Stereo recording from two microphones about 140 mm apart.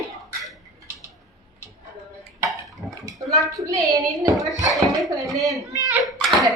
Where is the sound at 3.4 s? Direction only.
25° right (ahead or behind).